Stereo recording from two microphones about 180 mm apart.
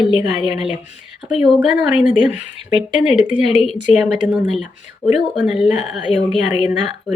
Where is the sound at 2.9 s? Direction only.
5° right (ahead or behind).